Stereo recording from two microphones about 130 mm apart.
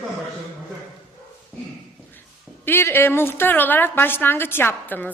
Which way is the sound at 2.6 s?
15° left (ahead or behind).